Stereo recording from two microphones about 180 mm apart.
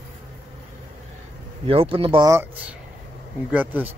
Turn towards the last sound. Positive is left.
turn(degrees=-10)  # may be behind; listen again after turning